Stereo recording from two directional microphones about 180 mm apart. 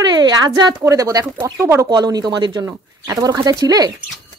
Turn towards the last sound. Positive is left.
turn(degrees=-20)  # may be behind; listen again after turning